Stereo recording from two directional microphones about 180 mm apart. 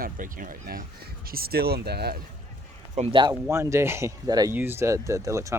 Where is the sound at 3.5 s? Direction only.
15° right (ahead or behind).